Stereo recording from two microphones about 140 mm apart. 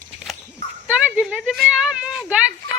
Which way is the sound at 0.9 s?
10° right (ahead or behind).